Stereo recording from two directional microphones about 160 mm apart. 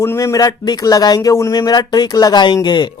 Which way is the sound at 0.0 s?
15° left (ahead or behind).